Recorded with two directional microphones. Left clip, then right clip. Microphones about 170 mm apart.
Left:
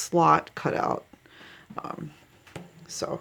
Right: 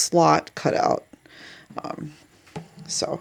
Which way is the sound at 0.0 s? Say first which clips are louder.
Right 3 dB; 20° right (ahead or behind).